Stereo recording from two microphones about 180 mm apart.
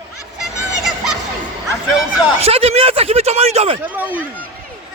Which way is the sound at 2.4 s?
35° right (ahead or behind).